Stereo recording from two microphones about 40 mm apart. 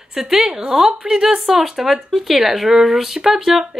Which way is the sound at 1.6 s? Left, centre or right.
Centre.